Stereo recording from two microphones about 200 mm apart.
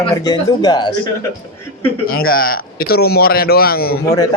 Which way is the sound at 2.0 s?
50° left (ahead or behind).